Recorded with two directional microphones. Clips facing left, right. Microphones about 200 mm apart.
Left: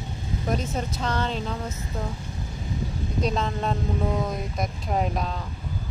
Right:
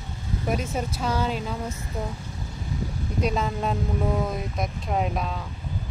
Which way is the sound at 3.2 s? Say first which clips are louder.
Right 1 dB; 5° right (ahead or behind).